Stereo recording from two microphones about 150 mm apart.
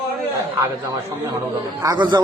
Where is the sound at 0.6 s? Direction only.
20° right (ahead or behind).